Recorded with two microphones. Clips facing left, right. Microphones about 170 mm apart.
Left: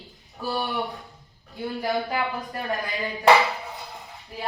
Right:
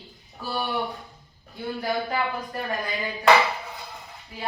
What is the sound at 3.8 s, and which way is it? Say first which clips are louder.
Music: left 1 dB; centre (ahead or behind).